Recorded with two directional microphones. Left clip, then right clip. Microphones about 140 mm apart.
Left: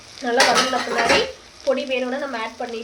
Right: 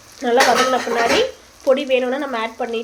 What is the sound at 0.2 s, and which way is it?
Frying, 60° right (ahead or behind).